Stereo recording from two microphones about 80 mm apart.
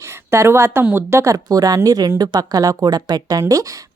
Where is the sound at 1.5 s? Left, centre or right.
Right.